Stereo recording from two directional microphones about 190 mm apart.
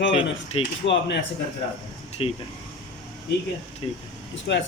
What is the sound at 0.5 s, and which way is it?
Speech, 30° left (ahead or behind).